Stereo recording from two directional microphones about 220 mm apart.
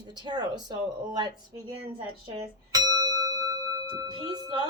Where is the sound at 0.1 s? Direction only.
20° right (ahead or behind).